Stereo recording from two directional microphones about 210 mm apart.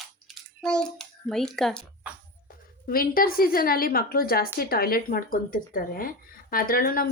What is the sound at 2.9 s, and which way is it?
A woman's voice, 45° left (ahead or behind).